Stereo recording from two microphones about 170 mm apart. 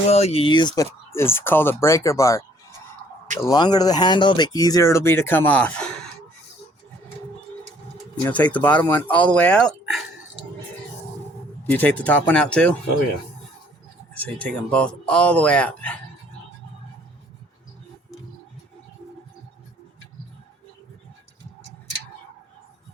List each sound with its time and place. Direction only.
0.1 s speech: 40° left (ahead or behind)
1.1 s speech: 15° left (ahead or behind)
3.4 s speech: 25° left (ahead or behind); by 6.1 s 5° left (ahead or behind)
8.2 s speech: 10° left (ahead or behind)
11.7 s speech: 10° left (ahead or behind)
14.1 s speech: 10° left (ahead or behind)